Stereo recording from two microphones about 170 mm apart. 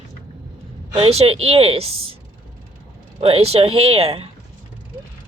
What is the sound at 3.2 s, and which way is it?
Speech, 35° right (ahead or behind).